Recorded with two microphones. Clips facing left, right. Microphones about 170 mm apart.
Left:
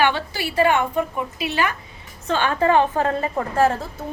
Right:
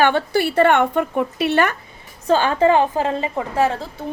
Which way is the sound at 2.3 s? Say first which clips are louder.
Right 3 dB; 30° right (ahead or behind).